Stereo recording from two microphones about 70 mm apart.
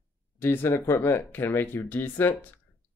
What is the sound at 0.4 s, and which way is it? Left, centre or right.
Speech, left.